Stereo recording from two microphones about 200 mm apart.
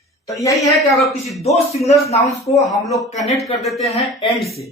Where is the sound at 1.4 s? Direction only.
30° left (ahead or behind).